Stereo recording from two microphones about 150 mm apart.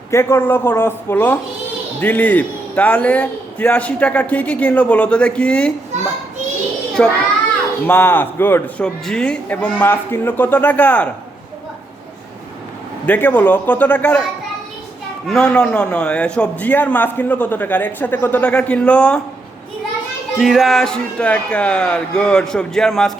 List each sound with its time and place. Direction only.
0.1 s a man's voice: 15° left (ahead or behind)
7.0 s a man's voice: 10° left (ahead or behind)
13.1 s a man's voice: 10° left (ahead or behind)
15.3 s a man's voice: 5° left (ahead or behind)
20.4 s speech: centre (ahead or behind)